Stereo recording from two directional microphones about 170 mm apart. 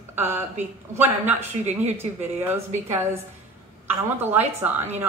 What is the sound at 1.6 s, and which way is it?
Speech, 40° right (ahead or behind).